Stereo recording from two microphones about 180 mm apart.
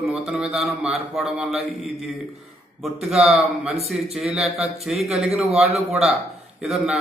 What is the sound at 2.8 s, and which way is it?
A man's voice, centre (ahead or behind).